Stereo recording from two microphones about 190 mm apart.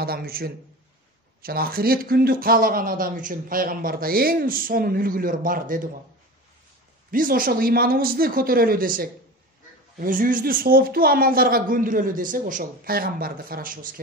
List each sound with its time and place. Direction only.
0.0 s speech: 50° right (ahead or behind)
7.1 s speech: 45° right (ahead or behind)